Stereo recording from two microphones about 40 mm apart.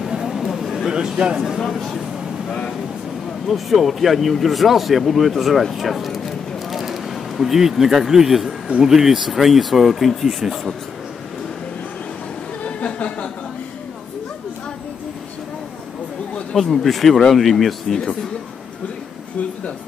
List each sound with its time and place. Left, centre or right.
0.1 s a sound: centre
0.9 s speech: right
1.7 s speech: centre
3.4 s speech: centre
12.6 s a sound: left
16.7 s speech: centre